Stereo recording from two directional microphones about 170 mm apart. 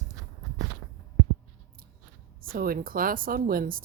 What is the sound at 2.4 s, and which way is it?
Speech, 60° right (ahead or behind).